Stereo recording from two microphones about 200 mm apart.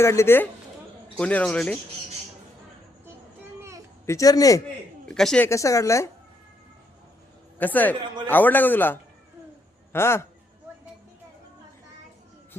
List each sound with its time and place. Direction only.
0.0 s a man's voice: 15° left (ahead or behind)
4.0 s a man's voice: 15° left (ahead or behind)
5.0 s a man's voice: 5° left (ahead or behind)
5.5 s a man's voice: 15° left (ahead or behind)
7.6 s a man's voice: 10° left (ahead or behind)